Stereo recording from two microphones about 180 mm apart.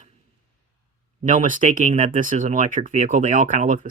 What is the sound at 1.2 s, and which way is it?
Speech, 45° right (ahead or behind).